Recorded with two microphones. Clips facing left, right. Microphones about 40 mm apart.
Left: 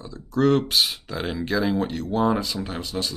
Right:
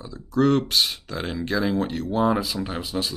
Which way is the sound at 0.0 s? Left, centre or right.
Centre.